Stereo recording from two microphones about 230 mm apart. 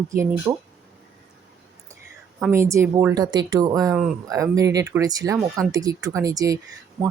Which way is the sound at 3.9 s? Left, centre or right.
Centre.